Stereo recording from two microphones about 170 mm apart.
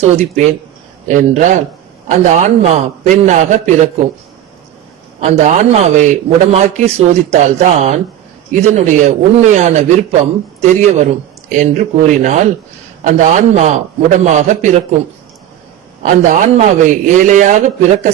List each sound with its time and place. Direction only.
0.0 s a man's voice: 40° right (ahead or behind)
5.2 s a man's voice: 40° right (ahead or behind)
16.0 s a man's voice: 50° right (ahead or behind)